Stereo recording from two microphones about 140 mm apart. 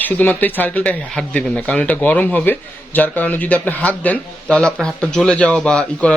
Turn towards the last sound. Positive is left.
turn(degrees=5)  # may be behind; listen again after turning